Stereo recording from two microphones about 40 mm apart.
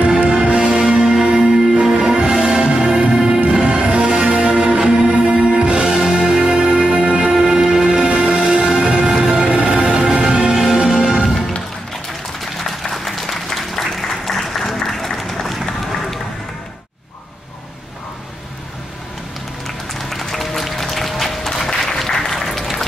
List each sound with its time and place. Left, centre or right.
0.0 s music: right
4.6 s music: centre
6.5 s music: right
7.2 s music: centre
12.5 s applause: centre
19.9 s music: centre